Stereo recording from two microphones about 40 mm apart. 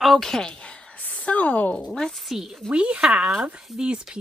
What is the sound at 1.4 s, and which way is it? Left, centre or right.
Speech, left.